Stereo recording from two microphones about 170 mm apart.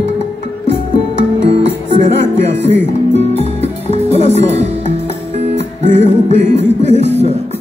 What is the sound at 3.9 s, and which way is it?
Music, 35° left (ahead or behind).